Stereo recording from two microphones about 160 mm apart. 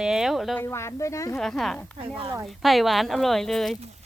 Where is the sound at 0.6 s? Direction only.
15° left (ahead or behind).